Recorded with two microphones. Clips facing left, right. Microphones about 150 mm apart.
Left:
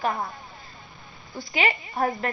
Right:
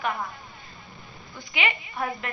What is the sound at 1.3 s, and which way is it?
Speech, 35° left (ahead or behind).